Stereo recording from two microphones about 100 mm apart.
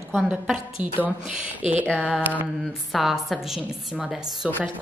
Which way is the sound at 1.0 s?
15° right (ahead or behind).